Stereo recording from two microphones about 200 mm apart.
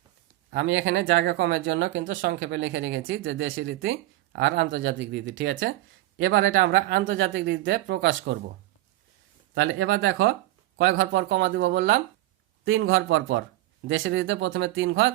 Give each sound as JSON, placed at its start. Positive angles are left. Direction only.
{"t": 0.5, "sound": "speech", "side_deg": -70}
{"t": 9.6, "sound": "speech", "side_deg": -85}
{"t": 10.8, "sound": "speech", "side_deg": -80}
{"t": 12.6, "sound": "speech", "side_deg": -90}
{"t": 13.8, "sound": "speech", "side_deg": -75}